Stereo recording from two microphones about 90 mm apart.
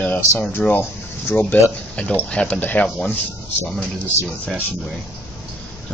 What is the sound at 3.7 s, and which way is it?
Speech, 10° left (ahead or behind).